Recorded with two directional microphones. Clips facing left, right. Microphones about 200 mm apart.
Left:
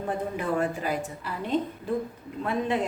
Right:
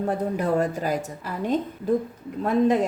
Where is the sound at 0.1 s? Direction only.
40° right (ahead or behind).